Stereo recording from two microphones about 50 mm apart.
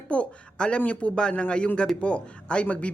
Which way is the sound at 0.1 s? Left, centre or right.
Left.